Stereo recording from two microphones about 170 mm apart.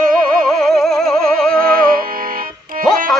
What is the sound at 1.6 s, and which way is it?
Music, 55° right (ahead or behind).